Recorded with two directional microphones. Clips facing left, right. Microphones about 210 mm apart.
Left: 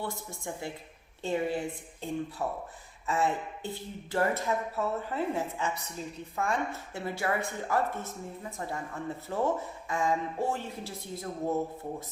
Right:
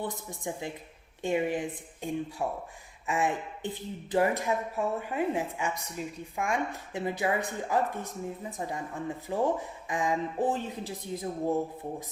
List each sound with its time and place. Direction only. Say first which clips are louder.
0.0 s a woman's voice: right 2 dB; 15° right (ahead or behind)